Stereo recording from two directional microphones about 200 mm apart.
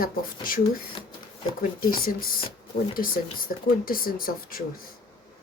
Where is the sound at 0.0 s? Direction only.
45° left (ahead or behind).